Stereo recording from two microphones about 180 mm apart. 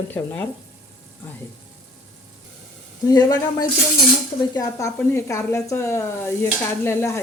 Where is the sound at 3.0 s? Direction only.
20° left (ahead or behind).